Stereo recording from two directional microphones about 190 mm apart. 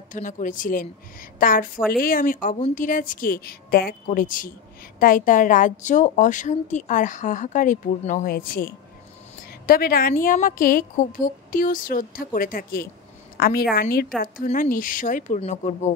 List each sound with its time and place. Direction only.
0.1 s a woman's voice: 45° left (ahead or behind)